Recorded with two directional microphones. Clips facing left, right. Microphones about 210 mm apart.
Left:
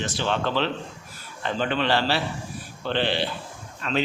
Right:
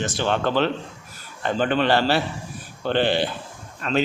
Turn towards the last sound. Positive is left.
turn(degrees=-45)  # may be behind; listen again after turning